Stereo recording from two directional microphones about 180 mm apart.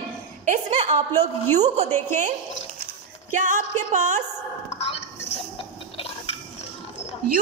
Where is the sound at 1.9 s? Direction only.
10° left (ahead or behind).